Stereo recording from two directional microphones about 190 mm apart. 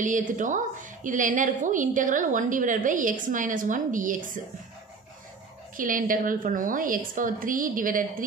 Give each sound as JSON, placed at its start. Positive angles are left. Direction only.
{"t": 0.0, "sound": "a woman's voice", "side_deg": -45}
{"t": 5.8, "sound": "a woman's voice", "side_deg": -45}